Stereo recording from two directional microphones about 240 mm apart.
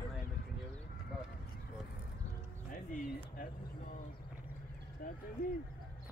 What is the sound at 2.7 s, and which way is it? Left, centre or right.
Speech, left.